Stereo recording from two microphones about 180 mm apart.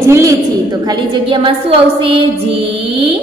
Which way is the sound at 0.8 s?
25° right (ahead or behind).